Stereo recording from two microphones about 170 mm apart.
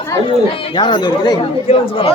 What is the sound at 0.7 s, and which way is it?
Speech, 25° left (ahead or behind).